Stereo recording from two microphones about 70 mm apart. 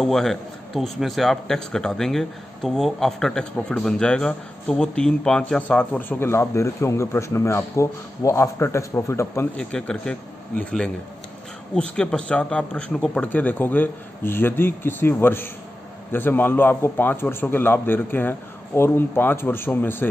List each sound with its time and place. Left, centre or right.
0.0 s a man's voice: centre
5.6 s a man's voice: left
9.6 s a man's voice: centre
11.7 s a man's voice: centre; by 20.1 s left